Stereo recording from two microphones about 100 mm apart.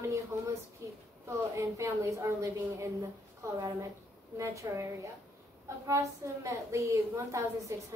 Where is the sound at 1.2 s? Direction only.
30° right (ahead or behind).